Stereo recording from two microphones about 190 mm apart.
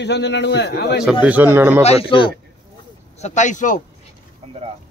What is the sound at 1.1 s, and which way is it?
Speech, 5° right (ahead or behind).